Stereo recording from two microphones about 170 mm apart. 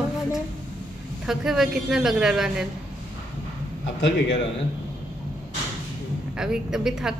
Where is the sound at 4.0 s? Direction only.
90° left.